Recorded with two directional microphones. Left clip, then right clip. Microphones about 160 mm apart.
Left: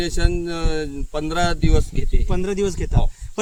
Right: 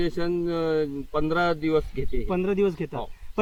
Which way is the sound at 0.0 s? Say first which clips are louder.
Left 1 dB; 45° left (ahead or behind).